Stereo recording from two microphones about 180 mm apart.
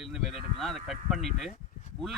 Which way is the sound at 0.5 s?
Centre (ahead or behind).